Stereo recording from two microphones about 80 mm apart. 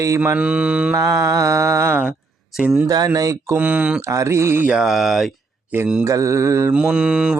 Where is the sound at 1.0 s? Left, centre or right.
Right.